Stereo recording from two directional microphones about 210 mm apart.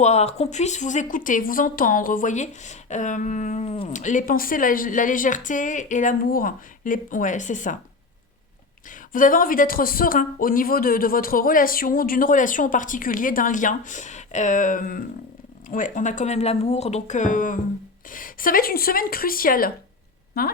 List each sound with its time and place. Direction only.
0.0 s speech: 30° left (ahead or behind)
8.9 s speech: 40° left (ahead or behind)